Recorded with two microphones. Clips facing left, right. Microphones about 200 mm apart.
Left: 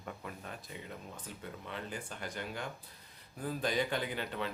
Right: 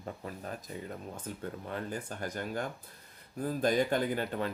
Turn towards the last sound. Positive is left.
turn(degrees=-45)  # may be behind; listen again after turning